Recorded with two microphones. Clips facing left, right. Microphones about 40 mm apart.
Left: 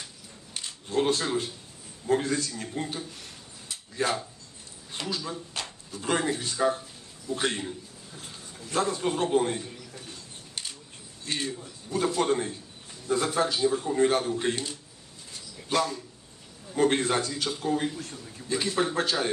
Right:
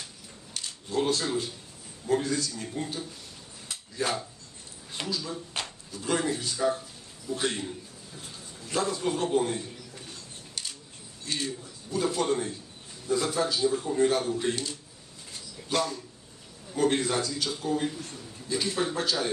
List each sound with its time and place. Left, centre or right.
0.9 s speech: left
4.0 s speech: left
8.7 s speech: left
10.5 s scissors: left
11.3 s speech: left
16.7 s a man's voice: left